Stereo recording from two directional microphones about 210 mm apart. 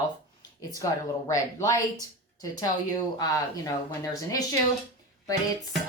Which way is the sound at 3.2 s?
15° left (ahead or behind).